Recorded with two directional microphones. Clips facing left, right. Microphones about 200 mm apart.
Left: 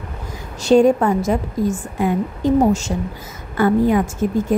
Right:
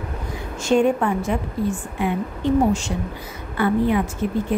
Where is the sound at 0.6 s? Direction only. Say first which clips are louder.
Left 5 dB; 35° left (ahead or behind).